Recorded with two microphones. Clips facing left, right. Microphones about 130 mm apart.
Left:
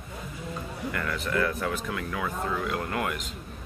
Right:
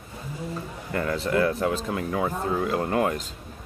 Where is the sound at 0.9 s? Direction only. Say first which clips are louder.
Right 6 dB; 30° right (ahead or behind).